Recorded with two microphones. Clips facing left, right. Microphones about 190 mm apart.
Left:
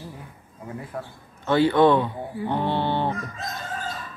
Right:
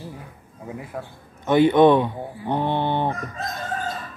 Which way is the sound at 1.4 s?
20° right (ahead or behind).